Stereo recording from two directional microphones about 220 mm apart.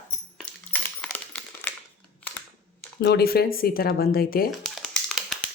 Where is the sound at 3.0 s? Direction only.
50° left (ahead or behind).